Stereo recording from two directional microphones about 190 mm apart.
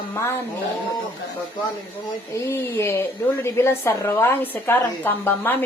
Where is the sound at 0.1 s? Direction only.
15° left (ahead or behind).